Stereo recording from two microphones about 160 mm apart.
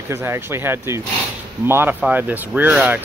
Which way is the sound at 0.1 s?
15° right (ahead or behind).